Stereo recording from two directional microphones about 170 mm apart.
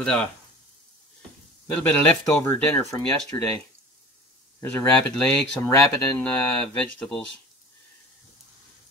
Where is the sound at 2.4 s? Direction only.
15° left (ahead or behind).